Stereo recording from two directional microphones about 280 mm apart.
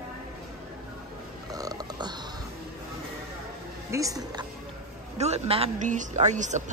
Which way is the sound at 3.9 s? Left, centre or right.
Centre.